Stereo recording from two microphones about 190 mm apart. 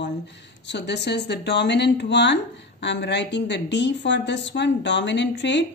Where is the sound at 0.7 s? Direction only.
65° left (ahead or behind).